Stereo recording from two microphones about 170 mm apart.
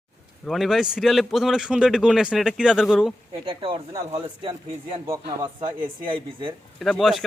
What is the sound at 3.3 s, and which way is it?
Speech, 30° right (ahead or behind).